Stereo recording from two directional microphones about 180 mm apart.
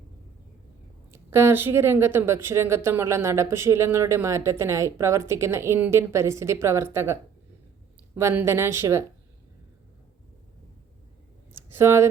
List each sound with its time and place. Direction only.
1.1 s speech: 15° right (ahead or behind)
11.8 s speech: 15° right (ahead or behind)